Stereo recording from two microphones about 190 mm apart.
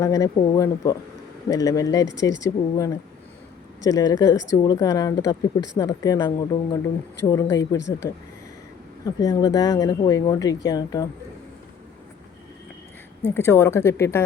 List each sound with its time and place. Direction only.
0.0 s speech: 15° left (ahead or behind)
13.3 s speech: 15° left (ahead or behind)